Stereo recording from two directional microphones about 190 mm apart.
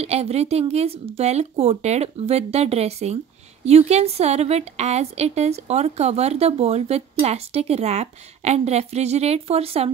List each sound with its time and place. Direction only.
0.0 s a woman's voice: 35° right (ahead or behind)